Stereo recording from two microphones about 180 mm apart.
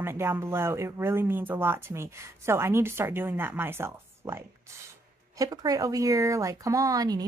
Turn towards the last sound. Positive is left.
turn(degrees=-20)  # may be behind; listen again after turning